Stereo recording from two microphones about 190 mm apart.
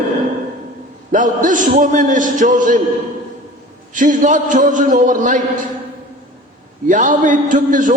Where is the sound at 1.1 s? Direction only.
45° right (ahead or behind).